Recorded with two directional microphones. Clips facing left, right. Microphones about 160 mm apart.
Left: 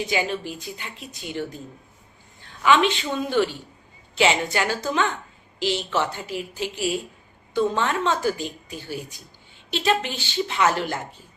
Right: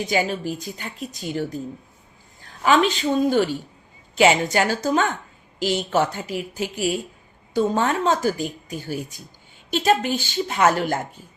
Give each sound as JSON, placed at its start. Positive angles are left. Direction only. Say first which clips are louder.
{"t": 0.1, "sound": "a woman's voice", "louder": "right 3 dB", "side_deg": -45}